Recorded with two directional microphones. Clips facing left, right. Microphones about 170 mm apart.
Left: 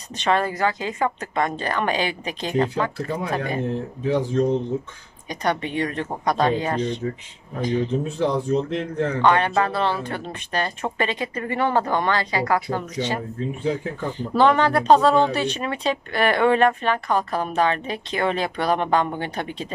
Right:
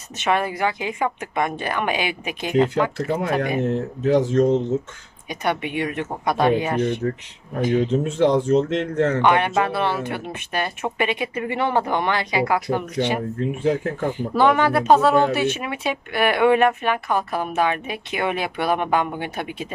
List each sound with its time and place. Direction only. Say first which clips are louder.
0.2 s speech: even; 10° right (ahead or behind)
3.6 s a man's voice: right 4 dB; 75° right (ahead or behind)
5.3 s speech: even; 10° right (ahead or behind)
6.8 s speech: right 3 dB; 55° right (ahead or behind)
7.9 s a man's voice: right 4 dB; 75° right (ahead or behind)
9.2 s speech: even; 20° right (ahead or behind)
13.4 s speech: right 4 dB; 55° right (ahead or behind)
14.1 s speech: left 1 dB; 10° right (ahead or behind)